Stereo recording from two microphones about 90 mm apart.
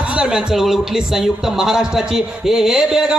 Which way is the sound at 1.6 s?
5° right (ahead or behind).